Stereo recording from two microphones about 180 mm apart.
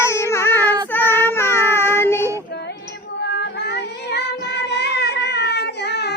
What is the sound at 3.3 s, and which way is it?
Music, 65° left (ahead or behind).